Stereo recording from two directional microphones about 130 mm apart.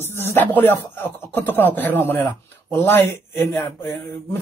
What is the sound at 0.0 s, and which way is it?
Speech, 15° left (ahead or behind).